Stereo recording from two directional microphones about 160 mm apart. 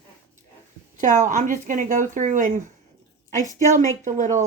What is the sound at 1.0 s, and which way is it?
Speech, 50° right (ahead or behind).